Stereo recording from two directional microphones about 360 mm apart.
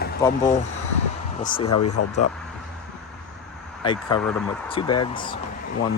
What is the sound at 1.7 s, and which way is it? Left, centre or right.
Speech, left.